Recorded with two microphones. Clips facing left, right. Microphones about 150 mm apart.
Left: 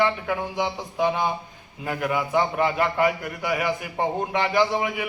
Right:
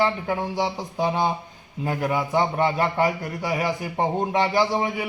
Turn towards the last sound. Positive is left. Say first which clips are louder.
# even
turn(degrees=-35)  # may be behind; listen again after turning